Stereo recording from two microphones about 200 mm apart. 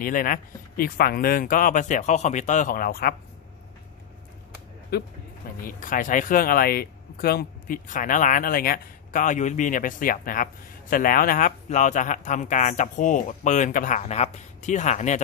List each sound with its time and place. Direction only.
0.0 s speech: 45° left (ahead or behind)
5.6 s speech: 40° left (ahead or behind)